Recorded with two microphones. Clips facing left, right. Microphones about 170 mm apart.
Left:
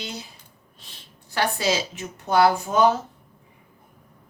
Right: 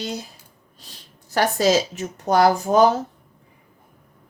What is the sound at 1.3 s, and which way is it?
Speech, 45° right (ahead or behind).